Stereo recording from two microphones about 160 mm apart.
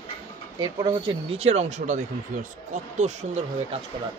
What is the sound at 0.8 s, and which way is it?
Speech, 35° right (ahead or behind).